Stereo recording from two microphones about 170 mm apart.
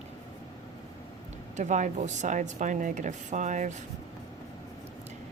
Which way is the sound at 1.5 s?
45° right (ahead or behind).